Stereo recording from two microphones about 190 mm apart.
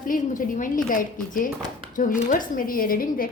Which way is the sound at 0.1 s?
45° left (ahead or behind).